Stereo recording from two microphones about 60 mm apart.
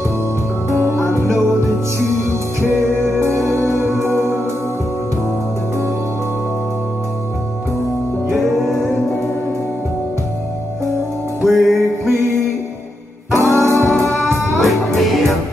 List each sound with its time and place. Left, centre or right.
0.7 s music: right
8.3 s music: centre
11.4 s music: centre
13.3 s music: right
14.6 s music: centre